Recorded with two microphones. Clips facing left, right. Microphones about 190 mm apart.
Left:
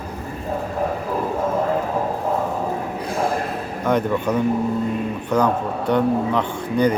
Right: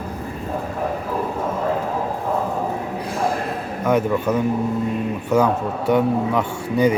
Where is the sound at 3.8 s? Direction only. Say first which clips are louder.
Right 1 dB; 5° right (ahead or behind).